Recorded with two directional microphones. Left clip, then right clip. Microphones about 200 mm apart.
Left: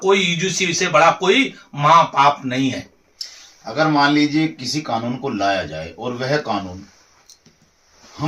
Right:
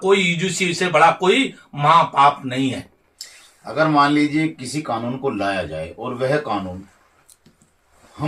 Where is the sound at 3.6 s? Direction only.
5° right (ahead or behind).